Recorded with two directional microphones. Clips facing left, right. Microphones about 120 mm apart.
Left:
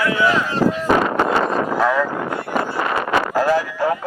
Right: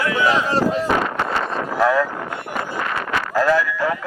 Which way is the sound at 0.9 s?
35° left (ahead or behind).